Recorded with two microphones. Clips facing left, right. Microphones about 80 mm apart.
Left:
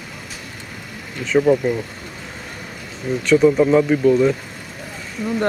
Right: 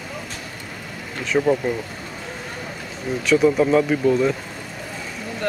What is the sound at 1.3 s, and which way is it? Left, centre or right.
Speech, centre.